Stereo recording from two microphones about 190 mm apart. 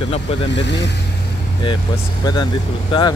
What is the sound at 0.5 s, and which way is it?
Speech, 65° left (ahead or behind).